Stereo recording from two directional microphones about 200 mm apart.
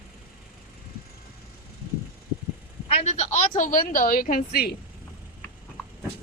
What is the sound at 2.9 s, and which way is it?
A woman's voice, 35° left (ahead or behind).